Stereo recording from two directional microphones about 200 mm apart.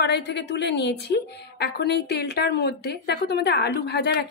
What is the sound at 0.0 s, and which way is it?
A woman's voice, 55° left (ahead or behind).